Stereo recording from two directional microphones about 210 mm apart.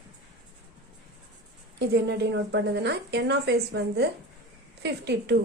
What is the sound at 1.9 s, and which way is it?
Speech, 55° right (ahead or behind).